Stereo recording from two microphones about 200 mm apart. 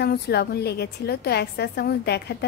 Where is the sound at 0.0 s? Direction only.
55° left (ahead or behind).